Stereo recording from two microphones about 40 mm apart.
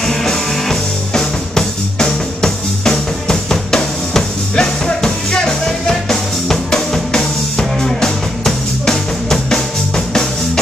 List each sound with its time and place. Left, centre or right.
0.0 s music: centre